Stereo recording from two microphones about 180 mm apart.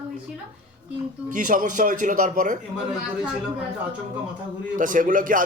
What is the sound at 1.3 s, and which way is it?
A man's voice, 45° right (ahead or behind).